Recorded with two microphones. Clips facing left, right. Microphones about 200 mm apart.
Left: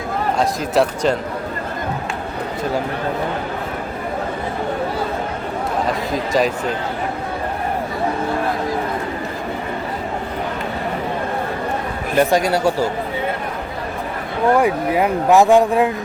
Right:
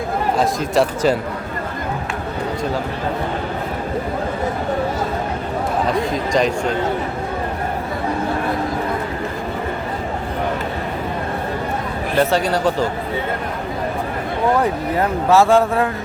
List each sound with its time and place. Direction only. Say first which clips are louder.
0.3 s speech: even; centre (ahead or behind)
6.0 s speech: even; 5° left (ahead or behind)
12.1 s speech: left 2 dB; 15° left (ahead or behind)
14.6 s speech: left 2 dB; 10° left (ahead or behind)